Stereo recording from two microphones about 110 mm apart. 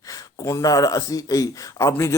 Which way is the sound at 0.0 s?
35° left (ahead or behind).